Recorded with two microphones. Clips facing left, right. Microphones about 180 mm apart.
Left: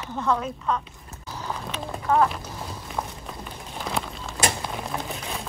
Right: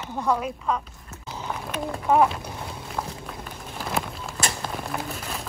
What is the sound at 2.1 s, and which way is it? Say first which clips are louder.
Speech: right 2 dB; 15° right (ahead or behind).